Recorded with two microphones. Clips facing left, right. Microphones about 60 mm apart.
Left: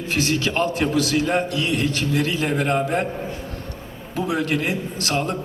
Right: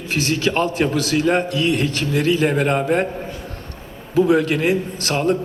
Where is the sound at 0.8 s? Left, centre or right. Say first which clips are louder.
Right 1 dB; right.